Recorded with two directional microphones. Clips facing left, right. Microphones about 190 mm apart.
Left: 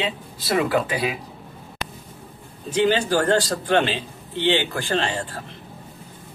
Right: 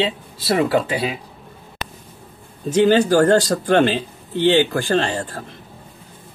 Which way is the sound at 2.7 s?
45° right (ahead or behind).